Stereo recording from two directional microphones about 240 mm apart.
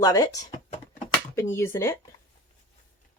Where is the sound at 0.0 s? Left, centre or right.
Centre.